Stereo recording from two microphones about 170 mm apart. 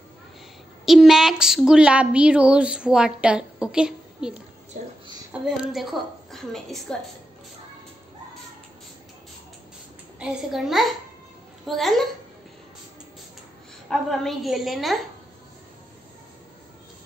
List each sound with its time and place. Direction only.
0.8 s a woman's voice: centre (ahead or behind)
4.7 s a woman's voice: 45° right (ahead or behind)
5.3 s a woman's voice: 5° right (ahead or behind)
10.1 s a woman's voice: 5° right (ahead or behind)
13.8 s a woman's voice: centre (ahead or behind)